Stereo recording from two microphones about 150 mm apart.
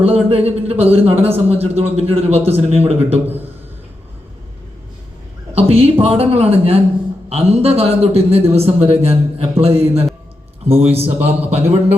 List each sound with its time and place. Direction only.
0.0 s a man's voice: 40° right (ahead or behind)
5.5 s a man's voice: 40° right (ahead or behind)